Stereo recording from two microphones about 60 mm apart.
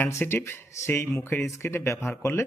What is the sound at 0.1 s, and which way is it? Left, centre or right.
A man's voice, left.